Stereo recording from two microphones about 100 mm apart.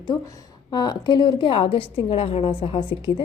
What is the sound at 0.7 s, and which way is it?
A woman's voice, 45° left (ahead or behind).